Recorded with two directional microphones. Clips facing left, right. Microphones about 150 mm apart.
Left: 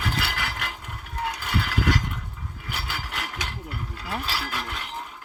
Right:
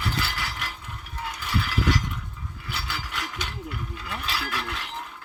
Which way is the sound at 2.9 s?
50° left (ahead or behind).